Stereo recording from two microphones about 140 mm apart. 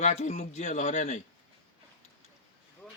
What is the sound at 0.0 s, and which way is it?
Speech, 55° left (ahead or behind).